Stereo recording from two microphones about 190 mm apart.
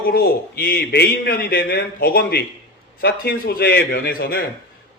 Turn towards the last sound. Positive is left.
turn(degrees=50)  # may be behind; listen again after turning